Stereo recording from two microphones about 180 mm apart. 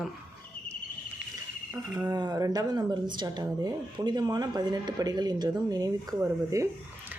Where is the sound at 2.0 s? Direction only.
20° right (ahead or behind).